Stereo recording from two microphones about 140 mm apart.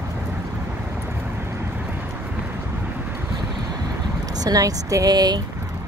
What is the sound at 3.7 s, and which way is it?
Vehicle, 25° right (ahead or behind).